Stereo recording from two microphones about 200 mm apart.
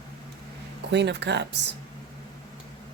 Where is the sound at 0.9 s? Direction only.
60° right (ahead or behind).